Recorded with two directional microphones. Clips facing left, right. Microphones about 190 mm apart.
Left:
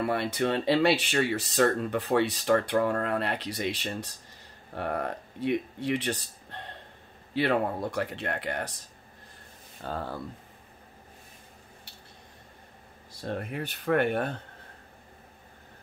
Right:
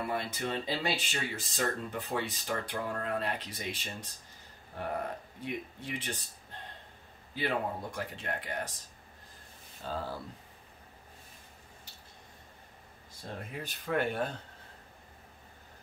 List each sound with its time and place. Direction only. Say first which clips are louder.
0.1 s speech: left 7 dB; 70° left (ahead or behind)
9.8 s speech: left 3 dB; 60° left (ahead or behind)
13.2 s speech: left 8 dB; 65° left (ahead or behind)